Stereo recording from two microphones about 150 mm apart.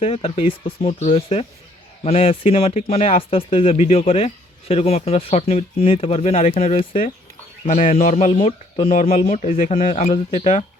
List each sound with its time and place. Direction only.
0.0 s speech: 40° left (ahead or behind)